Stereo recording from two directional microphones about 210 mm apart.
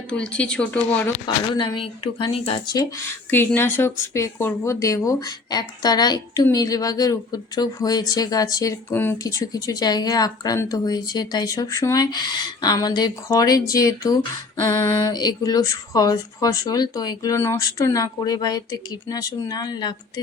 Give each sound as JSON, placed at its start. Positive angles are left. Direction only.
{"t": 0.1, "sound": "speech", "side_deg": 5}
{"t": 1.5, "sound": "a woman's voice", "side_deg": 25}
{"t": 2.7, "sound": "speech", "side_deg": 10}